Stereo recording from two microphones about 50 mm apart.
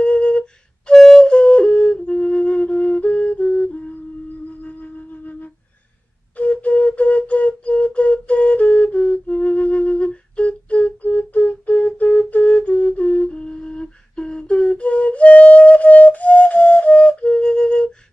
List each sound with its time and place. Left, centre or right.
0.0 s flute: left
0.9 s flute: centre
1.2 s flute: centre
2.0 s flute: centre
2.3 s flute: left
4.6 s music: left
6.3 s flute: left